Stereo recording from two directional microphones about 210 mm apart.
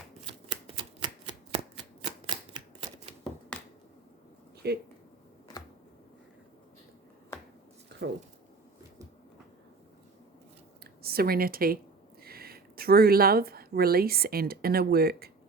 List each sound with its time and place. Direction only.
0.3 s shuffling cards: 25° right (ahead or behind)
3.5 s finger snapping: 5° left (ahead or behind)
4.6 s speech: 50° right (ahead or behind)
11.0 s a woman's voice: 45° right (ahead or behind)